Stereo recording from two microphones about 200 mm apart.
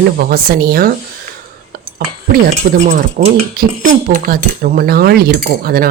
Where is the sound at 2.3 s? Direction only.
50° right (ahead or behind).